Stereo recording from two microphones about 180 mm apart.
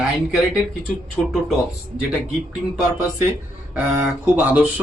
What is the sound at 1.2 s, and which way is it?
Speech, 5° left (ahead or behind).